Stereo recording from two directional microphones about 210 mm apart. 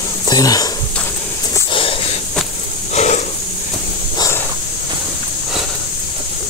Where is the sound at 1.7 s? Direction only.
25° left (ahead or behind).